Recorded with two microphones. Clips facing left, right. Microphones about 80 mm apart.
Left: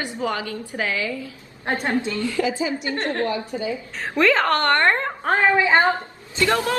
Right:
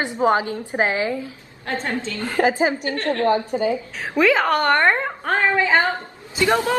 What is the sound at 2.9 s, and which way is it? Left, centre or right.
Speech, left.